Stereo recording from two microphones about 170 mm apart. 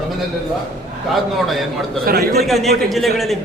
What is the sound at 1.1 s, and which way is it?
Speech, centre (ahead or behind).